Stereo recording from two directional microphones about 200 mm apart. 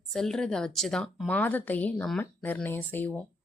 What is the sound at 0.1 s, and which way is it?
A woman's voice, centre (ahead or behind).